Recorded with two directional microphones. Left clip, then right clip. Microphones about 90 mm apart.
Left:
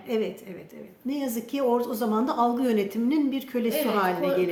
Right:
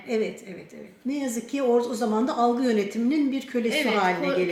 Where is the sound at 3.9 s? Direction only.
5° left (ahead or behind).